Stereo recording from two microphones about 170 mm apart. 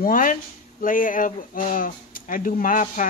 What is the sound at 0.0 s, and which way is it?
Speech, 50° left (ahead or behind).